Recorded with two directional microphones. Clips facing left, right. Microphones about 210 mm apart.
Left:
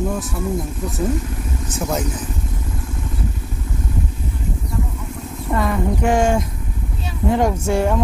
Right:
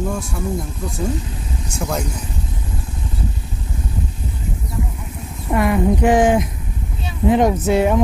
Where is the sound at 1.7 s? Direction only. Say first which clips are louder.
Left 1 dB; 5° left (ahead or behind).